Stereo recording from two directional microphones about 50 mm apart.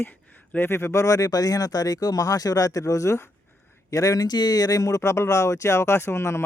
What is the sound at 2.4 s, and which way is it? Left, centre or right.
Speech, left.